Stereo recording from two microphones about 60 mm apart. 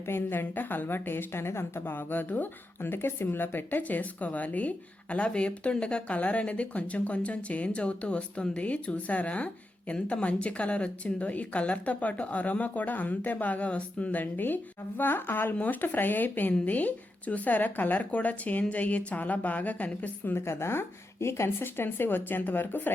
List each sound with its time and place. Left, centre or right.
0.0 s a woman's voice: left
20.3 s a woman's voice: left